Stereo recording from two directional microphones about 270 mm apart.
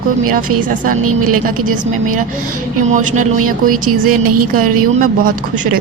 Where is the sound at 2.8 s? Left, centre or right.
Right.